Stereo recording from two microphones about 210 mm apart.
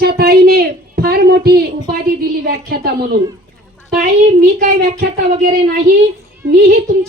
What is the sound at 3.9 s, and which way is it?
A child's voice, 40° right (ahead or behind).